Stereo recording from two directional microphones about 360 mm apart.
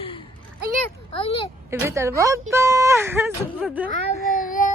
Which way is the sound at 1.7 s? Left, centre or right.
Centre.